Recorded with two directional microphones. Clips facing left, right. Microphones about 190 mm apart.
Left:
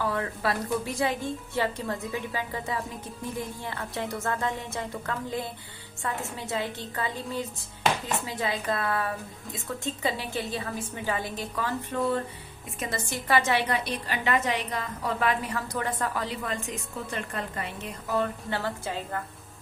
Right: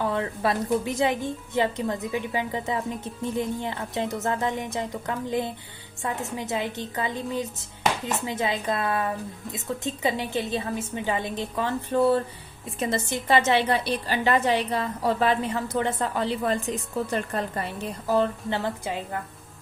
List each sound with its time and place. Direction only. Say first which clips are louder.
0.0 s a woman's voice: right 3 dB; 25° right (ahead or behind)
18.5 s a woman's voice: right 3 dB; 15° right (ahead or behind)